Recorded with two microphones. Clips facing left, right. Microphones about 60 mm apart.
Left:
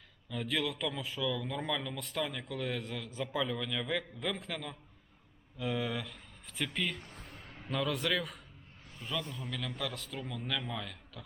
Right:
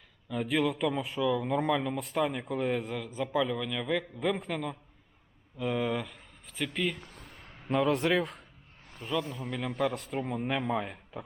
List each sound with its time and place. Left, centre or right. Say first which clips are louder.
0.3 s a man's voice: right 6 dB; centre
1.4 s a man's voice: right 8 dB; right; by 7.0 s centre
7.7 s a man's voice: right 7 dB; right
9.0 s a man's voice: right 6 dB; centre